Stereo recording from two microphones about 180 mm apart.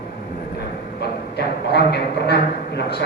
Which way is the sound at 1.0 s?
65° left (ahead or behind).